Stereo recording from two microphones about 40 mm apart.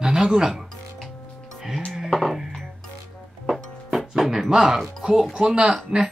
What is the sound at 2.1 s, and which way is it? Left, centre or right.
Music, centre.